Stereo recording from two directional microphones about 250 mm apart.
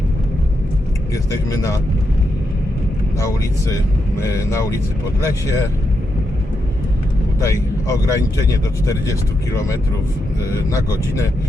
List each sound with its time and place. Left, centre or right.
1.1 s speech: centre
3.2 s speech: centre
7.4 s speech: centre
10.5 s speech: centre